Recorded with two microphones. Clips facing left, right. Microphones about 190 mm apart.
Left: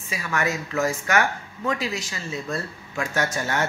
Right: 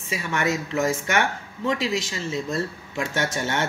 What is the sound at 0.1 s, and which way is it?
Speech, 25° right (ahead or behind).